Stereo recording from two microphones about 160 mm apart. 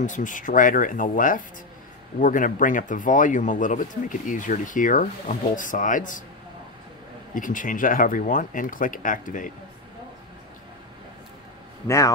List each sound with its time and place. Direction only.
0.0 s speech: 50° left (ahead or behind)
7.3 s speech: 55° left (ahead or behind)